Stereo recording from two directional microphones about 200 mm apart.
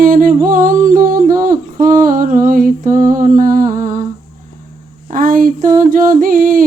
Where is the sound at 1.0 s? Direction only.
45° right (ahead or behind).